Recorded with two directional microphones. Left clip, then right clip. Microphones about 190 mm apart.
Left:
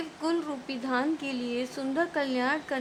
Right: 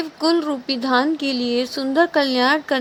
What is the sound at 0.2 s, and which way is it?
A woman's voice, 35° right (ahead or behind).